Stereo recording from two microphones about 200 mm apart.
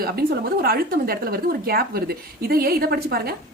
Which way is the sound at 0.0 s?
50° right (ahead or behind).